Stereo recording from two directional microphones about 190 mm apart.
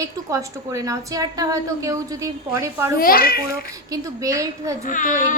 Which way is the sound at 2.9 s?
50° left (ahead or behind).